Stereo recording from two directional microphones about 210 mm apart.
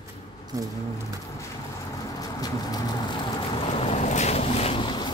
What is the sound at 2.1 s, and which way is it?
Boat, 15° left (ahead or behind).